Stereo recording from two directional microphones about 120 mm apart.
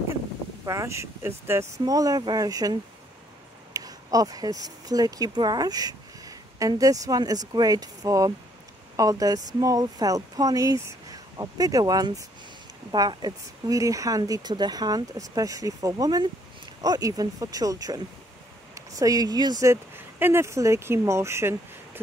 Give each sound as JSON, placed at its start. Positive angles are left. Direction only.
{"t": 0.7, "sound": "speech", "side_deg": -25}